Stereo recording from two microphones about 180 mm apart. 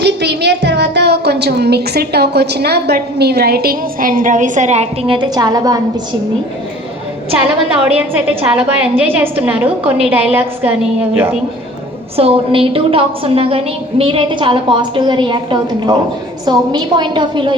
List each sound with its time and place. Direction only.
0.0 s a woman's voice: 70° right (ahead or behind); by 5.8 s 20° right (ahead or behind)
7.9 s a woman's voice: 10° right (ahead or behind)
12.1 s a woman's voice: 30° right (ahead or behind)